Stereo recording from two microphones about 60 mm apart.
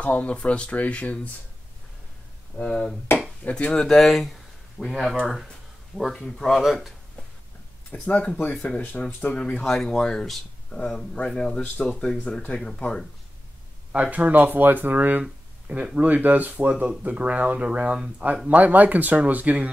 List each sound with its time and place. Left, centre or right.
0.0 s speech: left
2.5 s speech: centre
3.1 s a sound: left
3.4 s speech: centre
3.8 s speech: centre
7.9 s speech: left
14.1 s speech: right
18.5 s speech: right